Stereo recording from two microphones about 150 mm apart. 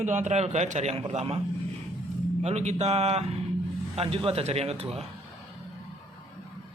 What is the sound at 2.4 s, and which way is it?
A man's voice, 45° right (ahead or behind).